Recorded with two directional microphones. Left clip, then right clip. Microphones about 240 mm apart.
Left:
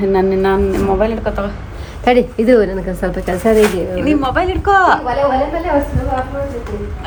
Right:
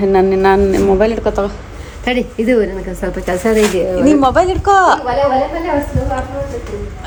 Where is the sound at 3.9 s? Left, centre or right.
Centre.